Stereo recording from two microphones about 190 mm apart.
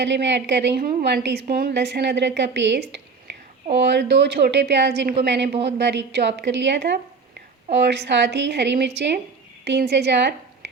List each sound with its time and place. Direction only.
0.0 s a woman's voice: 70° right (ahead or behind)